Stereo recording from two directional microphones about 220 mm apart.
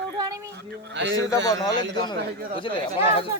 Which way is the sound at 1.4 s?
15° left (ahead or behind).